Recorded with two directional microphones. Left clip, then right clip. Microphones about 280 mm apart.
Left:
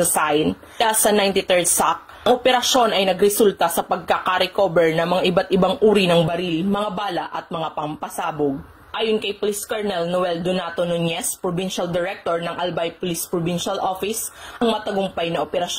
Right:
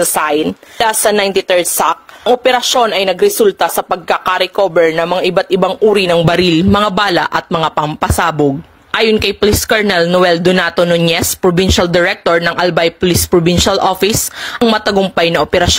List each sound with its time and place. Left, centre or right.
0.1 s speech: right